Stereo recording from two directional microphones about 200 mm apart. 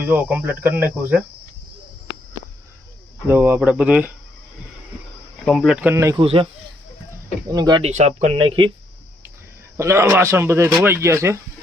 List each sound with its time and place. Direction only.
0.0 s speech: 10° right (ahead or behind)
3.2 s speech: 10° right (ahead or behind)
5.5 s speech: centre (ahead or behind)
6.1 s speech: 25° right (ahead or behind)
7.8 s speech: 35° right (ahead or behind)
9.7 s speech: 15° right (ahead or behind)